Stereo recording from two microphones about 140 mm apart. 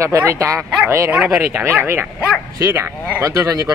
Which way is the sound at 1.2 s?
10° right (ahead or behind).